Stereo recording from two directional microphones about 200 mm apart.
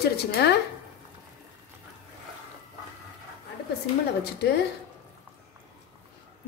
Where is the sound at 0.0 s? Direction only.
55° left (ahead or behind).